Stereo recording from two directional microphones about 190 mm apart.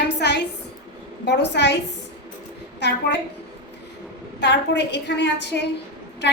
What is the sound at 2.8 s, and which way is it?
Speech, 65° left (ahead or behind).